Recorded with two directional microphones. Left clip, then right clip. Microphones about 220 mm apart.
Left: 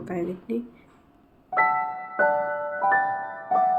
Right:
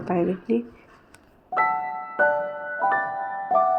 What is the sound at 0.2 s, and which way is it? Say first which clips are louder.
Speech: right 5 dB; 25° right (ahead or behind).